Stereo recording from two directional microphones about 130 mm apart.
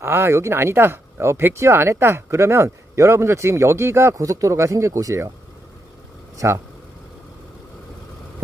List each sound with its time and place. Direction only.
0.0 s speech: 20° right (ahead or behind)
6.3 s speech: 20° right (ahead or behind)